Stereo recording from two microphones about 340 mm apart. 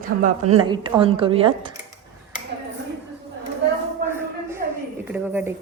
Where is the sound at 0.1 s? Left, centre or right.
Right.